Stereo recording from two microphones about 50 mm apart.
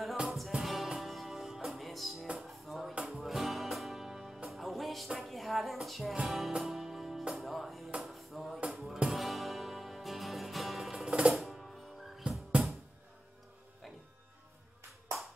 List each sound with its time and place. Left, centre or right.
0.6 s music: centre
11.1 s music: centre
11.3 s music: centre
12.2 s music: centre